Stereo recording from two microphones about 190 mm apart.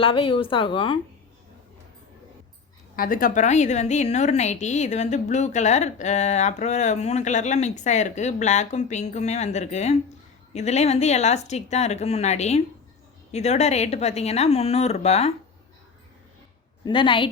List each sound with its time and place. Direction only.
0.0 s speech: 30° left (ahead or behind)
2.9 s a woman's voice: 50° left (ahead or behind)
16.8 s speech: 25° left (ahead or behind)